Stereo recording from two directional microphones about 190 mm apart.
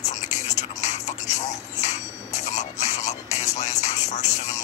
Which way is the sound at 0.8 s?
35° left (ahead or behind).